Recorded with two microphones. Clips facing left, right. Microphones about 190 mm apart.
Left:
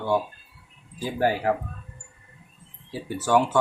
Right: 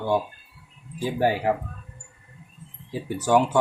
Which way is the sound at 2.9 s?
15° right (ahead or behind).